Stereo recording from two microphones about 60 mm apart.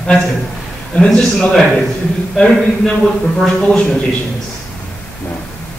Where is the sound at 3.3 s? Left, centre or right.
Centre.